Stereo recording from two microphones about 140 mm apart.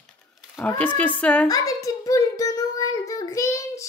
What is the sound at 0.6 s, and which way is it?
Speech, 15° left (ahead or behind).